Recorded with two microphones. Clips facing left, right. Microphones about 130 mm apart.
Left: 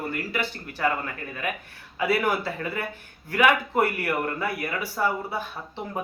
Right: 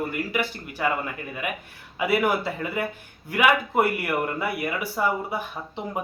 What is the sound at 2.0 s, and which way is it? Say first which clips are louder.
Speech: right 1 dB; 15° right (ahead or behind).